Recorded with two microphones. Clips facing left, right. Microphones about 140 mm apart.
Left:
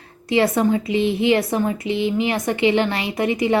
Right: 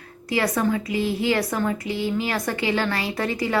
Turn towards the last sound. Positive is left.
turn(degrees=20)  # may be behind; listen again after turning